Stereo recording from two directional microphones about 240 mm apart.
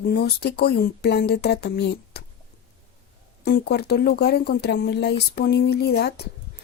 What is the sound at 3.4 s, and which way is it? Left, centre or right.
Speech, left.